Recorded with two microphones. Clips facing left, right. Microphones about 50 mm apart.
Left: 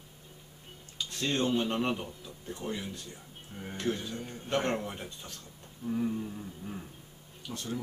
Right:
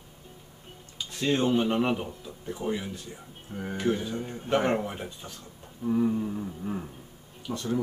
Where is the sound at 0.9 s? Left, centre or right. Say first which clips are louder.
Right 5 dB; centre.